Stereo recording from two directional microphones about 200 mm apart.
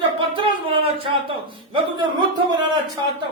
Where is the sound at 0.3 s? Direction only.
25° right (ahead or behind).